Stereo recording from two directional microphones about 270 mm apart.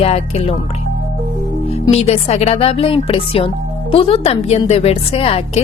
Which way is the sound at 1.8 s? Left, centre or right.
Left.